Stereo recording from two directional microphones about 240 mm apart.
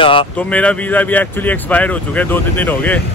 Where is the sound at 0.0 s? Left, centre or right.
Left.